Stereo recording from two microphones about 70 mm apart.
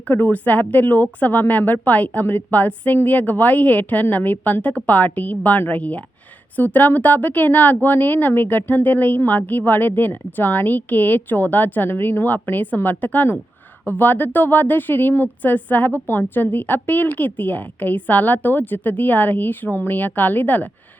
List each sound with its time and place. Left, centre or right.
0.1 s a woman's voice: left